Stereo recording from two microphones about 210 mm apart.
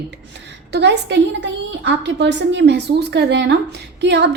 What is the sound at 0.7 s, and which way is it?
A woman's voice, 55° right (ahead or behind).